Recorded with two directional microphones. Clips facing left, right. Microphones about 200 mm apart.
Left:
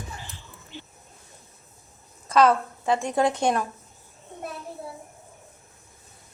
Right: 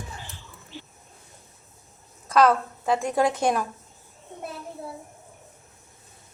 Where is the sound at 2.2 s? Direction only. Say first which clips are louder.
Even; centre (ahead or behind).